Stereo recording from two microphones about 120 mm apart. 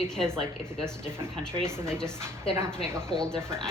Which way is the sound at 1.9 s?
5° left (ahead or behind).